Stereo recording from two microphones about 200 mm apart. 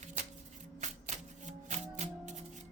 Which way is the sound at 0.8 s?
35° right (ahead or behind).